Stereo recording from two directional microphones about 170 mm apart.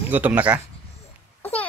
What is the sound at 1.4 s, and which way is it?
Babbling, 10° left (ahead or behind).